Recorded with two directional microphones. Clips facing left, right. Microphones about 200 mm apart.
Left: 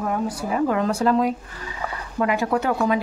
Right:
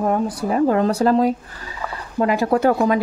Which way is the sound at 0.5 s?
35° right (ahead or behind).